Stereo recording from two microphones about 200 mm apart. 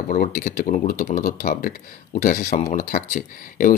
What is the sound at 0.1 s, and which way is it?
Speech, 45° left (ahead or behind).